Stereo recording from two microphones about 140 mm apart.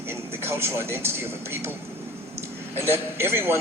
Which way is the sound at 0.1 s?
15° right (ahead or behind).